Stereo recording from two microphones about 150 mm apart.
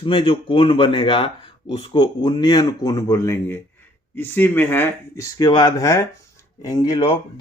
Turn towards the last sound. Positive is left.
turn(degrees=35)  # may be behind; listen again after turning